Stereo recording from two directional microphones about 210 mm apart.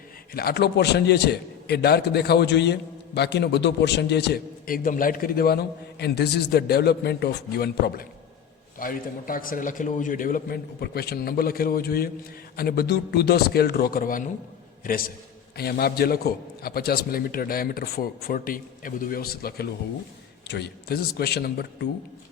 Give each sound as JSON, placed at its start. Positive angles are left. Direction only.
{"t": 0.3, "sound": "a man's voice", "side_deg": 50}